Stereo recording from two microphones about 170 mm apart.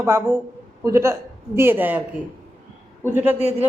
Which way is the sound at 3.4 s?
40° right (ahead or behind).